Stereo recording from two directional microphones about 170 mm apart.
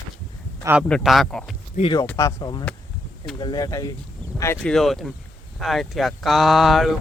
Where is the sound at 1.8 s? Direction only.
50° left (ahead or behind).